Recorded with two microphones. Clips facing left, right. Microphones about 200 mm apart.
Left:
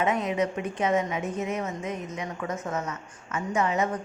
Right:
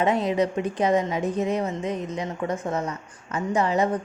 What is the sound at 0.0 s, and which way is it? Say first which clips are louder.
A woman's voice: right 4 dB; 35° right (ahead or behind).